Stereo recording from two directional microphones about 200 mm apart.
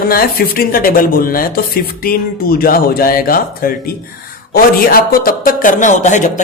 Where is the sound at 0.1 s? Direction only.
45° left (ahead or behind).